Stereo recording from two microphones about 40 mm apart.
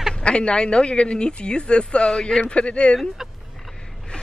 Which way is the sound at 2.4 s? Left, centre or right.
Left.